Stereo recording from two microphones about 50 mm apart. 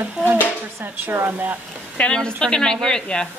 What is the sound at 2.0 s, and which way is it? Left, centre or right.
Speech, centre.